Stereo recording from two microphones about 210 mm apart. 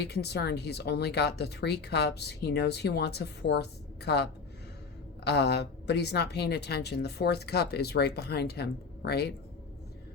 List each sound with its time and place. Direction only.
0.0 s speech: 50° left (ahead or behind)